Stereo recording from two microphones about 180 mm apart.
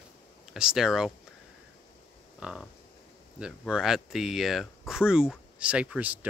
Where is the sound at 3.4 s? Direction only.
5° right (ahead or behind).